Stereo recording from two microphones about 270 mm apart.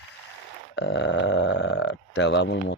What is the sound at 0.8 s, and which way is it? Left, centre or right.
Speech, left.